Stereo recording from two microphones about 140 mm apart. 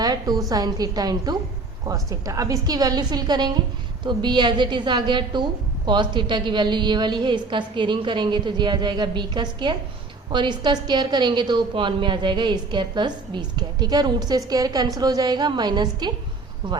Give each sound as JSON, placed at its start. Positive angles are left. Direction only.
{"t": 0.0, "sound": "a woman's voice", "side_deg": -30}